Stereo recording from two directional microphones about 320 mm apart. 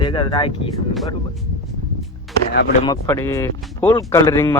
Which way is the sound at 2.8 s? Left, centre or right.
Centre.